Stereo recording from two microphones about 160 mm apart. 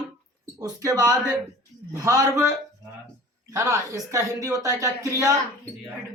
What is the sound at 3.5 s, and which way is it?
Speech, 20° right (ahead or behind).